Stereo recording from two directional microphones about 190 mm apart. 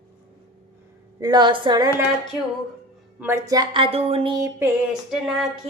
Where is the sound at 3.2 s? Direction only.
15° right (ahead or behind); by 4.4 s 30° right (ahead or behind).